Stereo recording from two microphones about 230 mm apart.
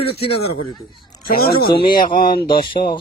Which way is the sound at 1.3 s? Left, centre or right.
Left.